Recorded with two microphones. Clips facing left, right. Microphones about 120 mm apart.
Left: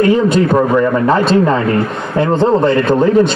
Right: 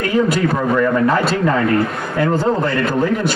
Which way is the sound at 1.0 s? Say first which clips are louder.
Left 5 dB; 25° left (ahead or behind).